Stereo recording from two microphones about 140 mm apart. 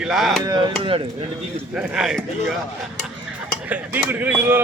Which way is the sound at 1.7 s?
5° right (ahead or behind).